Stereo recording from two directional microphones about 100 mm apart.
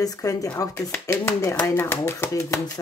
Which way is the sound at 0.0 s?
35° left (ahead or behind).